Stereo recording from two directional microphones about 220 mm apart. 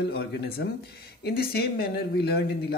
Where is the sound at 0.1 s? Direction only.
45° left (ahead or behind).